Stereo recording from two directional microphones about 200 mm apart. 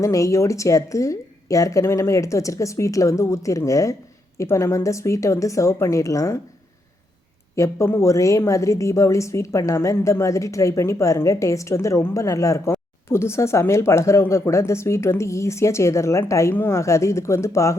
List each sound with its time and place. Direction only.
0.0 s a woman's voice: 15° left (ahead or behind)
7.5 s a woman's voice: 15° left (ahead or behind)